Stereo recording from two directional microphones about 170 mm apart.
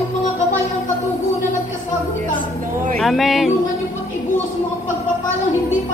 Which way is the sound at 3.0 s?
Centre (ahead or behind).